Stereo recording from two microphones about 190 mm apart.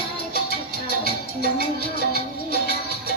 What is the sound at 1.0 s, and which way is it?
Music, 55° left (ahead or behind).